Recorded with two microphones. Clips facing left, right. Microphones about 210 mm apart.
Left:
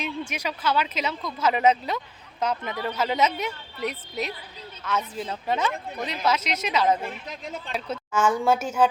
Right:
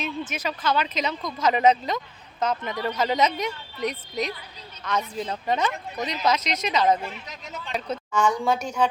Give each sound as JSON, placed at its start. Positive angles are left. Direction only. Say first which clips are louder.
{"t": 0.0, "sound": "a man's voice", "louder": "right 1 dB", "side_deg": 10}
{"t": 7.0, "sound": "speech", "louder": "left 2 dB", "side_deg": 50}
{"t": 7.7, "sound": "speech", "louder": "right 2 dB", "side_deg": 5}